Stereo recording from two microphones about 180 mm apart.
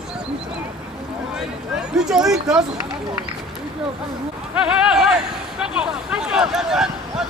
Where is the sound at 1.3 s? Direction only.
5° right (ahead or behind).